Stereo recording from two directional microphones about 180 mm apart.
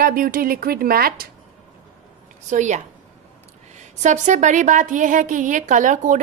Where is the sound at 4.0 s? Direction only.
40° right (ahead or behind).